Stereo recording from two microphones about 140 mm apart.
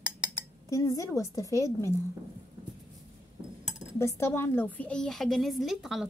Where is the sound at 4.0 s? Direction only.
20° left (ahead or behind); by 6.0 s centre (ahead or behind).